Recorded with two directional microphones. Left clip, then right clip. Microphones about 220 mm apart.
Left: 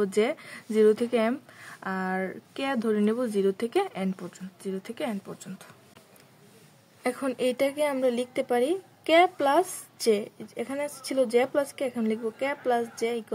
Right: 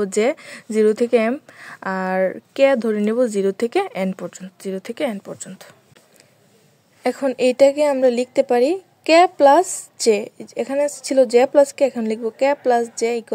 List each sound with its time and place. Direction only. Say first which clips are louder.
0.0 s a woman's voice: right 7 dB; 35° right (ahead or behind)
7.0 s a woman's voice: right 9 dB; 30° right (ahead or behind)